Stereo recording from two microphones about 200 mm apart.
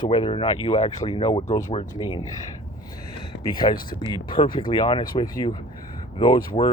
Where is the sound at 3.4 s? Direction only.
20° left (ahead or behind).